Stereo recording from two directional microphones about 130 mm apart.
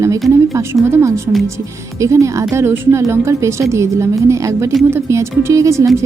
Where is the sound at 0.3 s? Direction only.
20° right (ahead or behind).